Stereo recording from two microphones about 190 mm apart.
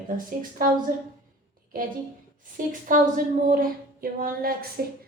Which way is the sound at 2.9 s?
45° right (ahead or behind).